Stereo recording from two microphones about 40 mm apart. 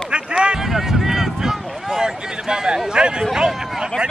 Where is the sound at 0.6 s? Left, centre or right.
Centre.